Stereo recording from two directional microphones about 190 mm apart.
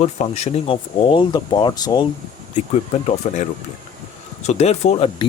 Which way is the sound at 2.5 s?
35° left (ahead or behind).